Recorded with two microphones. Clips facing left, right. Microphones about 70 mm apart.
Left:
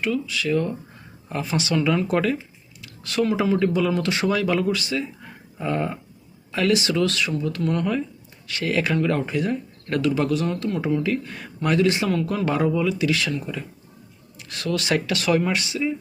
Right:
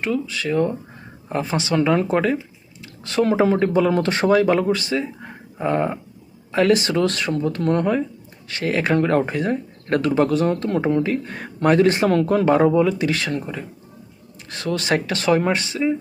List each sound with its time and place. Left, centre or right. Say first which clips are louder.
0.0 s speech: right 1 dB; right
2.8 s a sound: right 3 dB; right
3.2 s speech: right 3 dB; right